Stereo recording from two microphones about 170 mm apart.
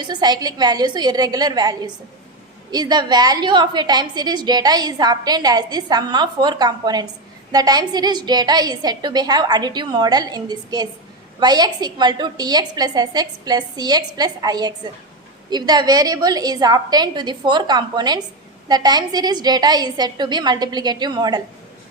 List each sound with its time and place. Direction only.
0.0 s a woman's voice: 25° right (ahead or behind)